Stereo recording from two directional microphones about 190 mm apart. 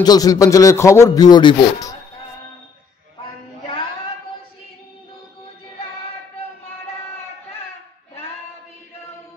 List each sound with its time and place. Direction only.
0.0 s speech: 20° left (ahead or behind)